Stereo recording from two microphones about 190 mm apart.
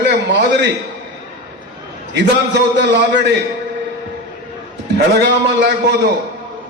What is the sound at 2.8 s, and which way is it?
Speech, 65° right (ahead or behind).